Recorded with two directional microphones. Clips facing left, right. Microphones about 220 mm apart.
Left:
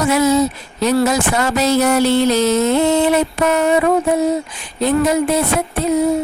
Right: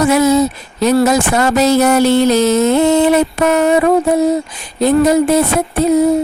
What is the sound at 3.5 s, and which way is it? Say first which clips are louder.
Speech: right 3 dB; 45° right (ahead or behind).